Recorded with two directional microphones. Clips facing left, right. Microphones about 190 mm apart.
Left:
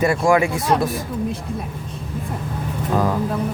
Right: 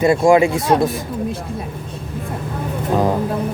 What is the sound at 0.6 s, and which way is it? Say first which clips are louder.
Speech: right 3 dB; centre (ahead or behind).